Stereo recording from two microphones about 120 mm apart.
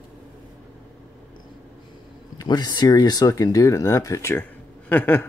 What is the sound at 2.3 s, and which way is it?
Speech, 35° left (ahead or behind).